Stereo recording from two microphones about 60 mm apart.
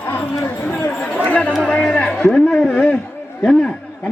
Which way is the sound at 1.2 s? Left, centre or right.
Left.